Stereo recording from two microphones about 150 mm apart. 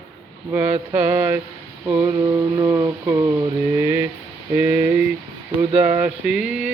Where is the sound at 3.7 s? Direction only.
15° right (ahead or behind).